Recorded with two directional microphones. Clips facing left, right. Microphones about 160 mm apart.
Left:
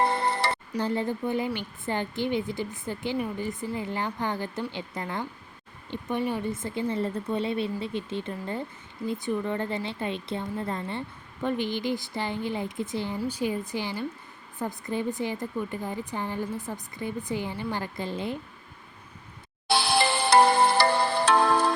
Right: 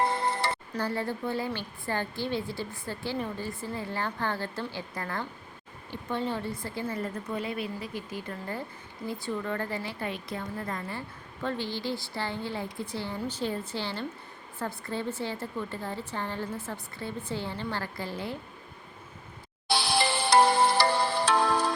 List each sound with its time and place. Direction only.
0.0 s music: 70° left (ahead or behind)
0.7 s a woman's voice: 20° left (ahead or behind)
19.9 s music: 60° left (ahead or behind)